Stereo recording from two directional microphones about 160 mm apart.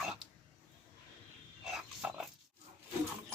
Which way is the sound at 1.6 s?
5° right (ahead or behind).